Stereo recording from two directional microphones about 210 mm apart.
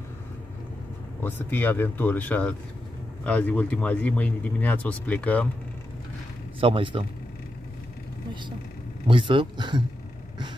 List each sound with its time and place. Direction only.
1.2 s speech: 10° left (ahead or behind)
6.6 s speech: 25° right (ahead or behind)
9.0 s speech: 25° right (ahead or behind)